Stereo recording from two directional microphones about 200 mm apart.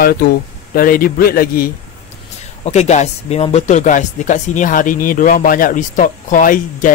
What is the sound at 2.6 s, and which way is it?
Speech, 35° left (ahead or behind).